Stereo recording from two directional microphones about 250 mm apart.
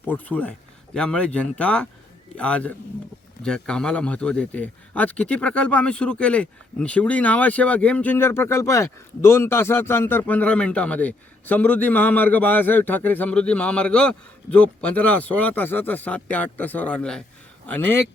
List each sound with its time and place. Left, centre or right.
0.1 s a man's voice: centre